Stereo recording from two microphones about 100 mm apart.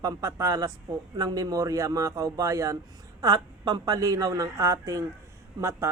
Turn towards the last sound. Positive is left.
turn(degrees=-30)  # may be behind; listen again after turning